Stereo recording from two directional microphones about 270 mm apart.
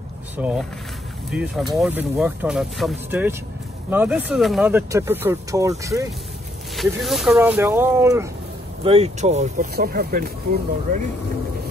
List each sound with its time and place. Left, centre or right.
0.4 s speech: centre
6.7 s speech: centre
8.8 s speech: right